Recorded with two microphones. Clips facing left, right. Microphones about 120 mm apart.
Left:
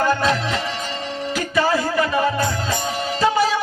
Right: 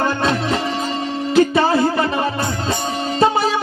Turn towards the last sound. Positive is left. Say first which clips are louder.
# right 3 dB
turn(degrees=-30)  # may be behind; listen again after turning